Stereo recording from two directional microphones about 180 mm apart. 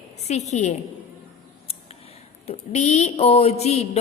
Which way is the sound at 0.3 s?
40° left (ahead or behind).